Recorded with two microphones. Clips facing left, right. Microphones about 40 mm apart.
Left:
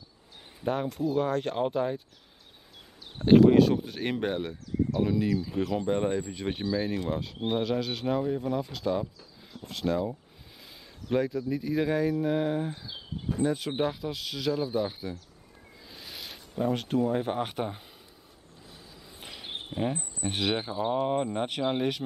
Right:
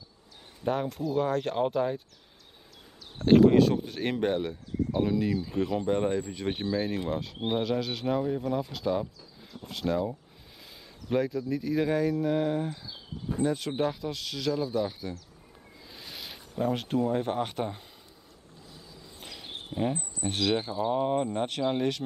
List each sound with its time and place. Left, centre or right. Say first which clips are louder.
0.7 s speech: left 1 dB; centre
3.3 s speech: left 1 dB; centre
15.9 s speech: even; centre
19.1 s a sound: left 2 dB; centre
19.7 s speech: right 1 dB; centre